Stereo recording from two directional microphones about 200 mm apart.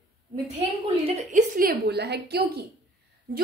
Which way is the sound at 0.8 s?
35° right (ahead or behind).